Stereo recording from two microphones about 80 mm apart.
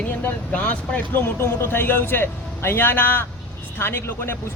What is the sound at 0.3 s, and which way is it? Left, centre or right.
Speech, left.